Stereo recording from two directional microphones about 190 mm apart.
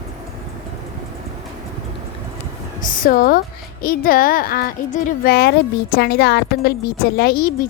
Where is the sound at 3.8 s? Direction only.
50° left (ahead or behind).